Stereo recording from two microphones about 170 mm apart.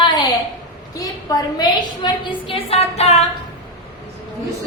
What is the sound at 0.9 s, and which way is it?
A woman's voice, 20° left (ahead or behind).